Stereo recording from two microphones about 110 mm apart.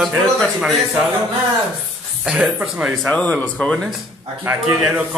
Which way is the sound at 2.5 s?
10° right (ahead or behind).